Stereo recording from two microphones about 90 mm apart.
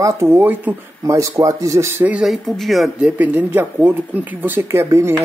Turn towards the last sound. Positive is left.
turn(degrees=-30)  # may be behind; listen again after turning